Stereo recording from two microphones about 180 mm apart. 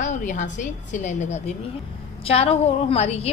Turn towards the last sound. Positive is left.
turn(degrees=35)  # may be behind; listen again after turning